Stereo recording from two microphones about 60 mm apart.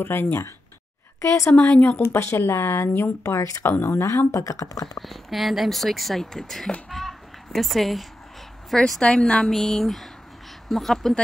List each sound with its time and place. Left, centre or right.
0.0 s speech: left
1.6 s speech: left
2.0 s speech: left
4.3 s speech: left
4.8 s speech: centre
6.9 s music: centre
8.7 s speech: centre
9.0 s a woman's voice: centre